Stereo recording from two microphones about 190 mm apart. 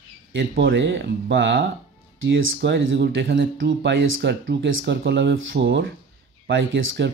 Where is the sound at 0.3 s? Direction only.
65° right (ahead or behind).